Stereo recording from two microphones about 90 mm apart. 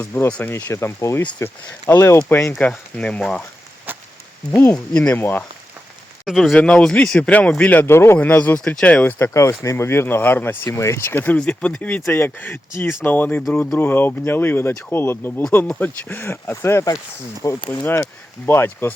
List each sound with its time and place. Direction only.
0.0 s speech: 20° left (ahead or behind)
0.5 s speech: 30° left (ahead or behind); by 3.4 s 10° left (ahead or behind)
3.9 s a sound: 20° right (ahead or behind)
4.7 s speech: 15° left (ahead or behind)
6.2 s speech: centre (ahead or behind)
9.1 s speech: 30° left (ahead or behind)
10.7 s speech: 30° left (ahead or behind)
11.3 s speech: 10° left (ahead or behind); by 18.9 s 25° left (ahead or behind)